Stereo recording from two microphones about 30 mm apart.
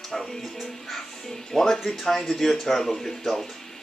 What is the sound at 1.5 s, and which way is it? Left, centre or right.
Speech, centre.